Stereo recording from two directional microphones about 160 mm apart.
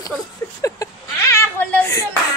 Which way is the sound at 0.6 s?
20° left (ahead or behind).